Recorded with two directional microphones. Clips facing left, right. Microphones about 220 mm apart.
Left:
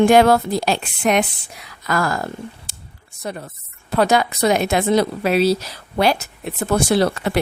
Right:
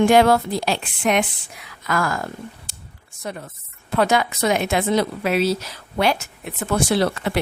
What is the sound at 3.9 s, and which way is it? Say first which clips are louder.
A woman's voice: left 2 dB; 35° left (ahead or behind).